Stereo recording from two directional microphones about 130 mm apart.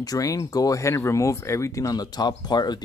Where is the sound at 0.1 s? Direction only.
25° left (ahead or behind).